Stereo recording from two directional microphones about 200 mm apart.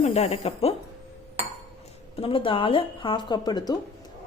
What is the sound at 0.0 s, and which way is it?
Speech, 30° left (ahead or behind).